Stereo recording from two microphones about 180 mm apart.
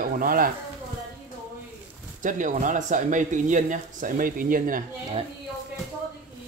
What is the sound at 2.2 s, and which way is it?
Speech, 45° right (ahead or behind).